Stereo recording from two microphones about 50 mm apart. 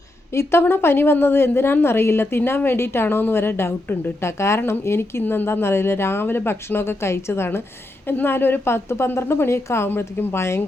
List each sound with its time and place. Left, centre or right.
0.3 s a woman's voice: left
0.7 s a woman's voice: left
5.2 s a woman's voice: left
5.5 s speech: left
8.0 s a woman's voice: left